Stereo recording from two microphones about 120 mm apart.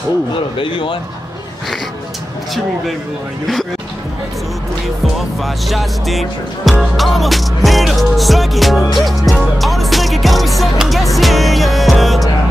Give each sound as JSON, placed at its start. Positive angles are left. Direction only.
{"t": 0.6, "sound": "a man's voice", "side_deg": 45}
{"t": 5.4, "sound": "music", "side_deg": 0}